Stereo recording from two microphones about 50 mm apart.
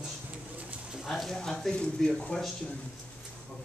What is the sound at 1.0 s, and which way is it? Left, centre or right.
Speech, centre.